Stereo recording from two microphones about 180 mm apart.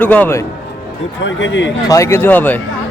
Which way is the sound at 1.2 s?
90° left.